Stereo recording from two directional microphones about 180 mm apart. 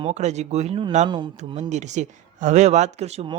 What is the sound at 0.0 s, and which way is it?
Speech, 40° right (ahead or behind).